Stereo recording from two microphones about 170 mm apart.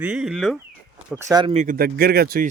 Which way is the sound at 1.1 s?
25° right (ahead or behind).